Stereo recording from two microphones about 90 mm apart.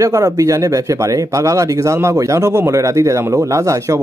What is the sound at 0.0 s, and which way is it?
Speech, 40° right (ahead or behind).